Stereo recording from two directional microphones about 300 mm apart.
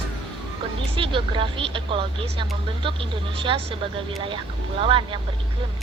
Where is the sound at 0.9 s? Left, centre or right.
Centre.